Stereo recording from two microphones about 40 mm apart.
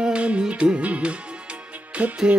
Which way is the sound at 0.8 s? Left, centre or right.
Right.